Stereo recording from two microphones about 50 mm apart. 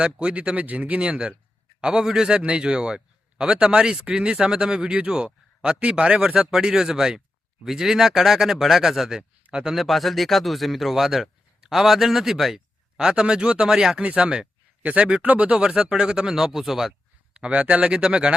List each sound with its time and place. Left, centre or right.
0.0 s speech: right
2.4 s speech: right
9.7 s speech: centre
13.0 s speech: centre
17.3 s speech: right